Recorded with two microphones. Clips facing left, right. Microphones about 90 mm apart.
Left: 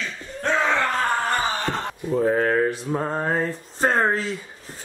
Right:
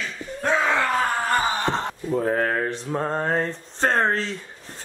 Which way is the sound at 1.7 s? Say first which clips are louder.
Right 2 dB; 25° right (ahead or behind).